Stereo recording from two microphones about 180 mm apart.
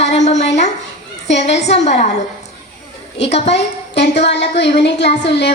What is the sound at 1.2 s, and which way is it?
Speech, 40° left (ahead or behind).